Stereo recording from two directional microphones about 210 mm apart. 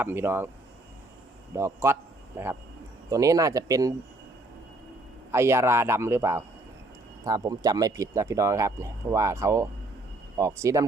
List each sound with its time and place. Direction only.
0.0 s speech: 10° right (ahead or behind)
1.5 s a man's voice: 15° right (ahead or behind)
5.3 s speech: 15° right (ahead or behind)